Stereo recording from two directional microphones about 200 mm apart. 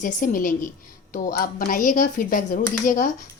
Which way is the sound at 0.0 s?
40° left (ahead or behind).